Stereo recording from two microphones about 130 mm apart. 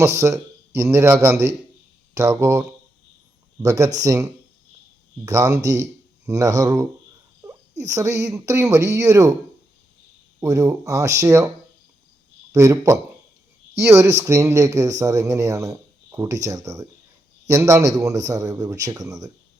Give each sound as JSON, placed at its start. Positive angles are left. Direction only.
{"t": 0.0, "sound": "speech", "side_deg": -20}
{"t": 10.4, "sound": "speech", "side_deg": -25}
{"t": 12.5, "sound": "speech", "side_deg": -25}